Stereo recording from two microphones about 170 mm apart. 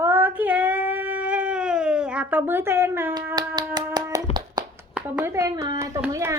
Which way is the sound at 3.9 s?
20° right (ahead or behind).